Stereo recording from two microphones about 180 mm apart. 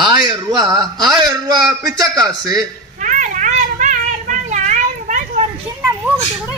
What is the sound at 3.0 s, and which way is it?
Children playing, 45° right (ahead or behind).